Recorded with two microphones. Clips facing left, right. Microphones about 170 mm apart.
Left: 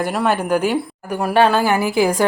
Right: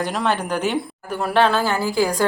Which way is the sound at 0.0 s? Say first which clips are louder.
Left 3 dB; 10° left (ahead or behind).